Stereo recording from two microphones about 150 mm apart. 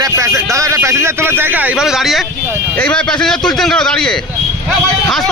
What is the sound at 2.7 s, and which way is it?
A man's voice, 5° left (ahead or behind).